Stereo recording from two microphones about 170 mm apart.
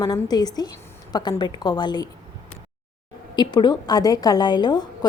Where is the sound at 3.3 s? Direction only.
25° left (ahead or behind).